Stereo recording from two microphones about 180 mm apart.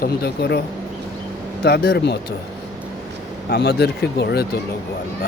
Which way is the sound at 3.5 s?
60° left (ahead or behind).